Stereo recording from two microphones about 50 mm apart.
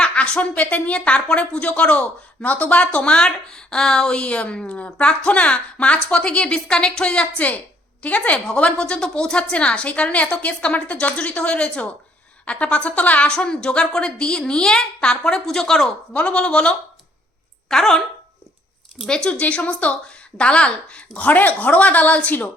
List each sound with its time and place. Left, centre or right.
0.0 s a woman's voice: left
3.2 s a woman's voice: centre
16.1 s a woman's voice: left
17.7 s a woman's voice: centre
19.0 s a woman's voice: centre; by 22.4 s left